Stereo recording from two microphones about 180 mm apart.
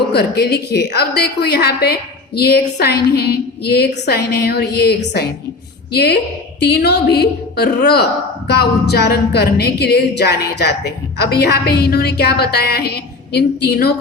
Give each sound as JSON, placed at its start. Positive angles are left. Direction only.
{"t": 0.1, "sound": "a woman's voice", "side_deg": 60}